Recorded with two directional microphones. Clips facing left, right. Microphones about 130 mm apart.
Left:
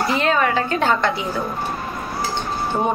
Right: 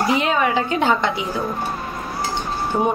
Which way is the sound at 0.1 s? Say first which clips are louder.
Left 2 dB; 15° right (ahead or behind).